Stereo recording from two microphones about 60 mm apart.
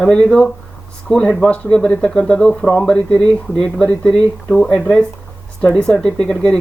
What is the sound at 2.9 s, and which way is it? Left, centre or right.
Speech, centre.